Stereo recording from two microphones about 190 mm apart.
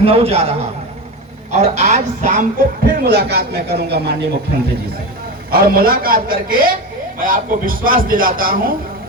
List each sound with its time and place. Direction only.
0.0 s a man's voice: 30° right (ahead or behind)
1.5 s speech: 35° right (ahead or behind); by 4.2 s 60° right (ahead or behind)
5.5 s a man's voice: 50° right (ahead or behind)